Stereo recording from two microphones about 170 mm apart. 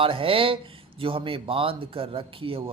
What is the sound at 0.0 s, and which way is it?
Speech, 30° right (ahead or behind).